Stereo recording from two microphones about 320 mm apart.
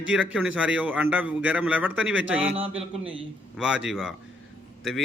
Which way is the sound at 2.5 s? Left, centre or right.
Centre.